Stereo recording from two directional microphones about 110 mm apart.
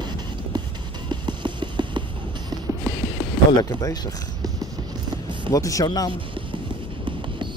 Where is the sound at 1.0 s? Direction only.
45° right (ahead or behind).